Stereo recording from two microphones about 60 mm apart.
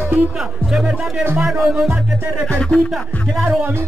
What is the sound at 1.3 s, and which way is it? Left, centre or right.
Music, centre.